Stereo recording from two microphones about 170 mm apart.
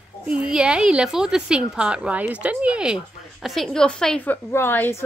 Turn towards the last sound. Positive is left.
turn(degrees=15)  # may be behind; listen again after turning